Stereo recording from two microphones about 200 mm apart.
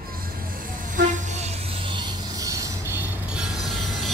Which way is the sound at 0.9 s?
40° right (ahead or behind).